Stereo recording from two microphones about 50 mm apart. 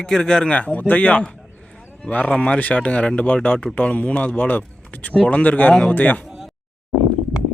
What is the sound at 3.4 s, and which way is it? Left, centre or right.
Speech, left.